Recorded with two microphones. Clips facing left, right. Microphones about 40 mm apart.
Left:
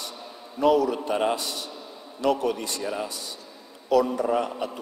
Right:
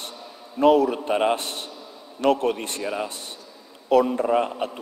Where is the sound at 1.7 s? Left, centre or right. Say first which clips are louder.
Even; centre.